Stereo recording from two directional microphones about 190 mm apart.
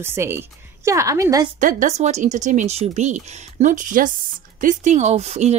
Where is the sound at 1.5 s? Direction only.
40° right (ahead or behind).